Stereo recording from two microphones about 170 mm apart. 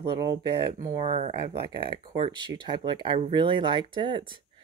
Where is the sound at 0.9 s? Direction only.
35° right (ahead or behind).